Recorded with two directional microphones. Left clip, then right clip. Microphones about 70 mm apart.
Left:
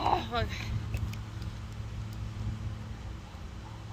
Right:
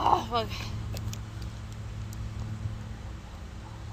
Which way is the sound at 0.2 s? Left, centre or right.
Left.